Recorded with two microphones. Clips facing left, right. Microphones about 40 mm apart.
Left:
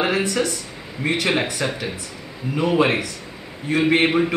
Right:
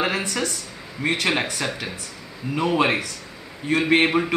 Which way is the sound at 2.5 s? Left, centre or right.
Centre.